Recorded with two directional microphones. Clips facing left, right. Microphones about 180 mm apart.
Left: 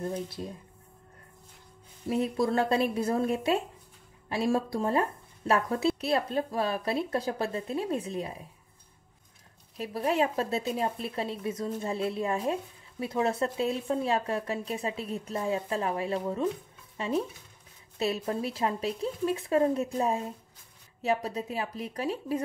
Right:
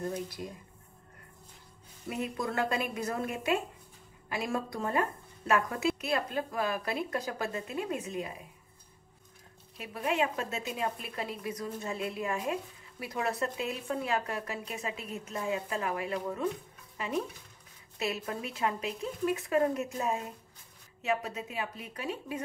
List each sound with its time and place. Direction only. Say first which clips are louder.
0.0 s speech: left 2 dB; 30° left (ahead or behind)
2.0 s speech: left 7 dB; 35° left (ahead or behind)
9.8 s speech: left 4 dB; 35° left (ahead or behind)